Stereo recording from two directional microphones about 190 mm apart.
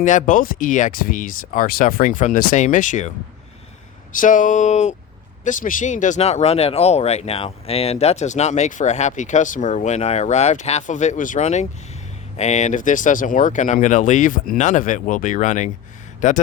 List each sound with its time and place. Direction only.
0.0 s speech: 40° left (ahead or behind)
4.1 s speech: 45° left (ahead or behind)